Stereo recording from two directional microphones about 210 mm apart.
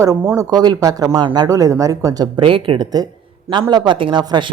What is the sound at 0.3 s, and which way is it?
A woman's voice, 20° right (ahead or behind).